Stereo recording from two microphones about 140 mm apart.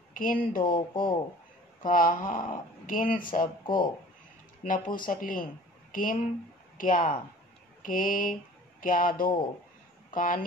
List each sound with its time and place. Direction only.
0.1 s speech: 75° left (ahead or behind)
0.7 s speech: 35° left (ahead or behind)
1.9 s speech: 75° left (ahead or behind)
3.6 s speech: 35° left (ahead or behind)
4.6 s a woman's voice: 75° left (ahead or behind)